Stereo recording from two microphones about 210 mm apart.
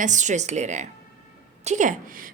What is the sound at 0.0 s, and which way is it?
A woman's voice, 35° right (ahead or behind).